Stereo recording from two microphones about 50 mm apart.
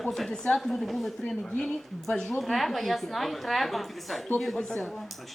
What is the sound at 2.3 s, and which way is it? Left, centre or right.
A woman's voice, centre.